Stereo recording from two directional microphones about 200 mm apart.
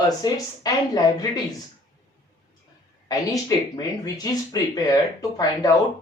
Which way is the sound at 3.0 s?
15° left (ahead or behind).